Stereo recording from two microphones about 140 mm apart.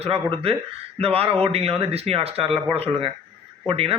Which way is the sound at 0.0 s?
45° right (ahead or behind).